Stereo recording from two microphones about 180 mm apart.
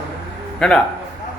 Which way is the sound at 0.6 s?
5° left (ahead or behind).